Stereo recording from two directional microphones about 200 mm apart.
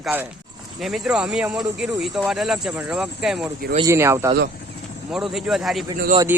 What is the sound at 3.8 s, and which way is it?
Speech, 15° right (ahead or behind).